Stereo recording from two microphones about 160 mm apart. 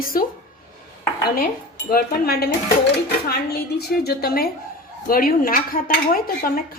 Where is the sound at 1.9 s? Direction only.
70° left (ahead or behind).